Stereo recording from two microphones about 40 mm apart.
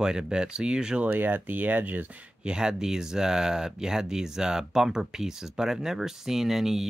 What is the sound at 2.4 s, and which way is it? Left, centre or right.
Speech, centre.